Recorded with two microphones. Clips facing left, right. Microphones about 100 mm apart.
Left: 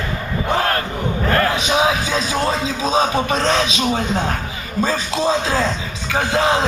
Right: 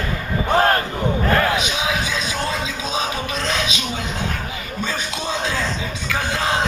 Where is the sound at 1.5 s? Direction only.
35° left (ahead or behind).